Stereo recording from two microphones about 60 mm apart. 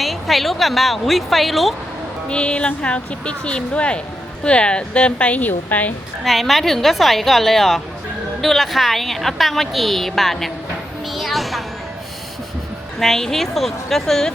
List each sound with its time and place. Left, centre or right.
0.0 s a woman's voice: centre
2.2 s a woman's voice: centre
6.2 s a woman's voice: centre
11.1 s a sound: centre
13.0 s a woman's voice: centre